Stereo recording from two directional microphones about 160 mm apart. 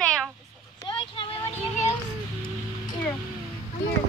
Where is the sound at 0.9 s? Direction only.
30° left (ahead or behind).